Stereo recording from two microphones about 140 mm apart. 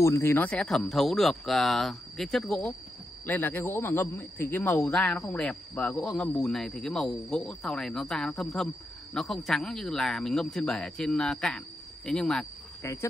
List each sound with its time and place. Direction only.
0.0 s a man's voice: 20° left (ahead or behind); by 2.7 s centre (ahead or behind)
3.3 s a man's voice: 15° left (ahead or behind)
12.8 s speech: 15° left (ahead or behind)